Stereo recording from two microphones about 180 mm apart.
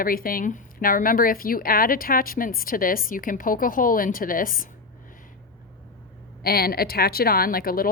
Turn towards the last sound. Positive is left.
turn(degrees=55)  # may be behind; listen again after turning